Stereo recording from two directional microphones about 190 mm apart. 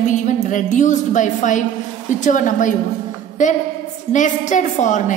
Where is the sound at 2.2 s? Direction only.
40° left (ahead or behind).